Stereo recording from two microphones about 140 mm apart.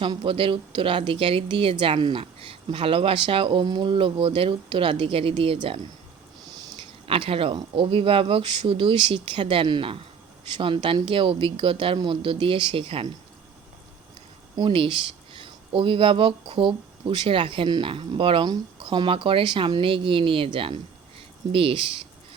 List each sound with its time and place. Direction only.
0.0 s speech: 35° right (ahead or behind)
7.0 s speech: 40° right (ahead or behind)
14.5 s speech: 35° right (ahead or behind)